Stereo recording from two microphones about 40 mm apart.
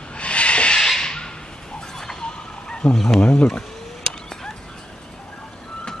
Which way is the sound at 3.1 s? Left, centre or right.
Left.